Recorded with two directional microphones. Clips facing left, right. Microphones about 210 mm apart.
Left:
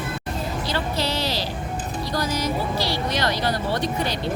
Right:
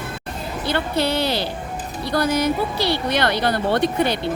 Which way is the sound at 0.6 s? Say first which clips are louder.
Right 7 dB; 55° right (ahead or behind).